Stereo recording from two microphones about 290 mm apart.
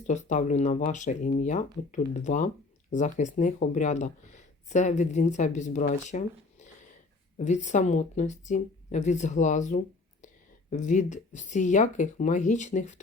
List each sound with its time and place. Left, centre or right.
0.1 s speech: left